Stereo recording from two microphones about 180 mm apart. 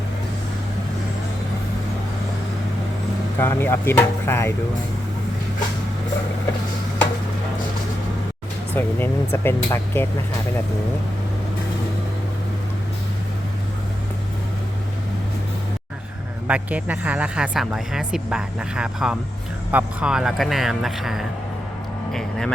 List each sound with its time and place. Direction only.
3.3 s speech: 10° left (ahead or behind)
8.7 s speech: 10° left (ahead or behind)
16.5 s speech: 10° right (ahead or behind)